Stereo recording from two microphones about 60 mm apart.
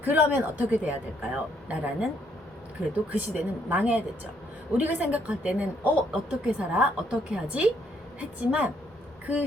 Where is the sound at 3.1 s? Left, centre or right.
Right.